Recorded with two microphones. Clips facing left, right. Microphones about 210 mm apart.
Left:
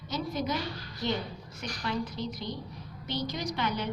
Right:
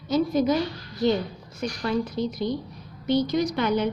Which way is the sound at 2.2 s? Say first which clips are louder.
Right 9 dB; 45° right (ahead or behind).